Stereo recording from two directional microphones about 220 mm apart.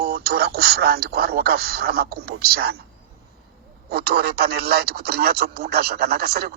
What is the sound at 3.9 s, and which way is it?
Speech, 45° right (ahead or behind).